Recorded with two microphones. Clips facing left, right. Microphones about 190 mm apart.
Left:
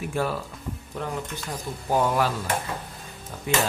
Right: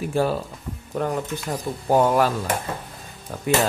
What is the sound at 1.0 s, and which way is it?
Speech, 50° right (ahead or behind).